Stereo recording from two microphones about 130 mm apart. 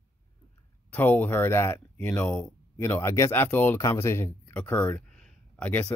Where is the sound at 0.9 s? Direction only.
15° left (ahead or behind).